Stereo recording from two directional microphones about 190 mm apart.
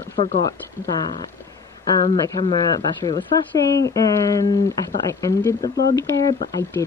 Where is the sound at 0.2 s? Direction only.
30° left (ahead or behind).